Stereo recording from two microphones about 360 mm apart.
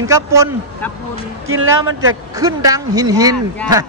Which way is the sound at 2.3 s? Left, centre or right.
Centre.